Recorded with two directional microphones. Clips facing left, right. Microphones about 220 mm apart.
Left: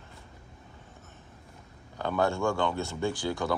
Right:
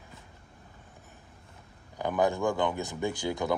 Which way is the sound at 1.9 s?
15° right (ahead or behind).